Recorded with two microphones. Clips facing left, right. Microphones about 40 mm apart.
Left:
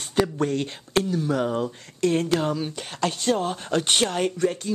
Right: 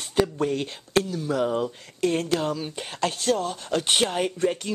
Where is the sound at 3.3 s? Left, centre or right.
Centre.